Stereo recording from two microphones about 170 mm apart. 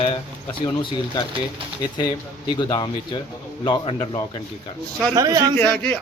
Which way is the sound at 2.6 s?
25° left (ahead or behind).